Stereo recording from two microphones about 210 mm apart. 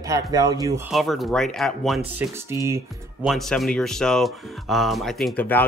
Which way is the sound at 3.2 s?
Centre (ahead or behind).